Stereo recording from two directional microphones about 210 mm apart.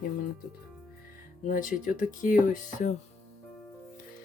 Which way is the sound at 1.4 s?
40° left (ahead or behind).